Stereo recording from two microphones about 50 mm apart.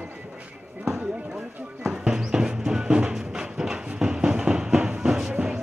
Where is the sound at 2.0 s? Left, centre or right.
Centre.